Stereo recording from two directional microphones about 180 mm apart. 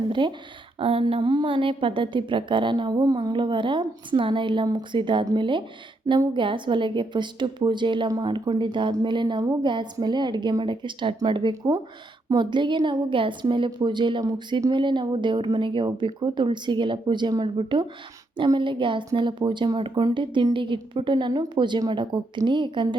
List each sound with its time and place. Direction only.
0.1 s a woman's voice: 25° right (ahead or behind)